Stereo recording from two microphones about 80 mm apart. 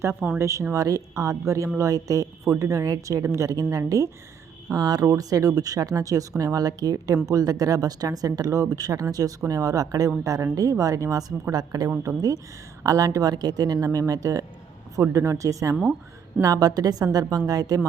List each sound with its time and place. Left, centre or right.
0.0 s speech: right
14.1 s speech: right
15.7 s speech: centre
16.4 s speech: right